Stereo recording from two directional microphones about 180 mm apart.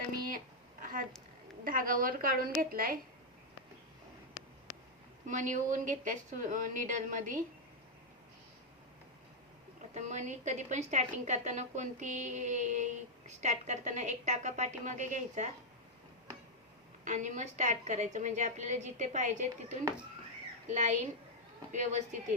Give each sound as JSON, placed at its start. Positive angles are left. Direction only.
{"t": 0.8, "sound": "a sound", "side_deg": -50}
{"t": 1.6, "sound": "a woman's voice", "side_deg": -50}
{"t": 5.2, "sound": "a woman's voice", "side_deg": -45}
{"t": 9.9, "sound": "a woman's voice", "side_deg": -40}
{"t": 17.0, "sound": "a woman's voice", "side_deg": -45}